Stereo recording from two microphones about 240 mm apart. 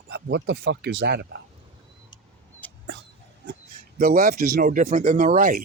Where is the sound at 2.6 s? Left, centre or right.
Centre.